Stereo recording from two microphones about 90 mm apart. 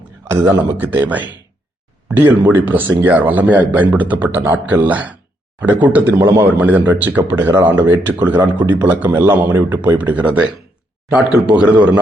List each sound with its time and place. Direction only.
0.3 s a man's voice: 20° right (ahead or behind)